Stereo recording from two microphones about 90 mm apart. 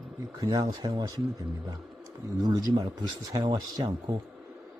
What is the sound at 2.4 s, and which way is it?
Speech, 50° right (ahead or behind).